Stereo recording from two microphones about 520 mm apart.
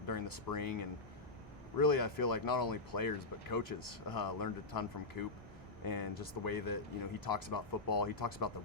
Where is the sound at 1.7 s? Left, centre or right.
Left.